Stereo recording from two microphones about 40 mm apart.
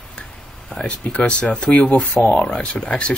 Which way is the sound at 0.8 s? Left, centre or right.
Left.